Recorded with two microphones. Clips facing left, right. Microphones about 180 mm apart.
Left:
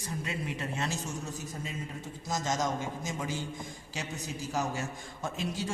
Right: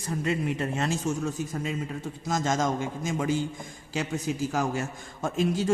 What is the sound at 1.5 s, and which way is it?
A man's voice, 65° right (ahead or behind).